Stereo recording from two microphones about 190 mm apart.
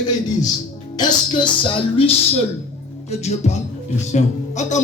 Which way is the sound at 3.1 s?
35° left (ahead or behind).